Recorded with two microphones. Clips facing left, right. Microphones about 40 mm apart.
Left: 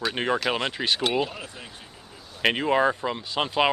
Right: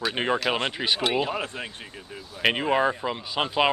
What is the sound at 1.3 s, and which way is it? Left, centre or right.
Speech, right.